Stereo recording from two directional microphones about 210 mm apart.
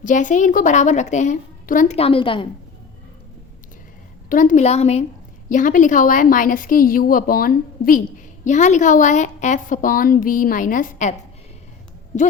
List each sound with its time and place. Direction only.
0.0 s a woman's voice: 35° left (ahead or behind)
4.3 s a woman's voice: 40° left (ahead or behind)